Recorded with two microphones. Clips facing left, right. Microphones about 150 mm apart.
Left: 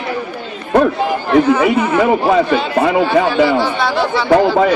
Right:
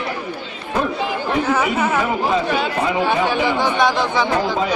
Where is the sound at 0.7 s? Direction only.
60° left (ahead or behind).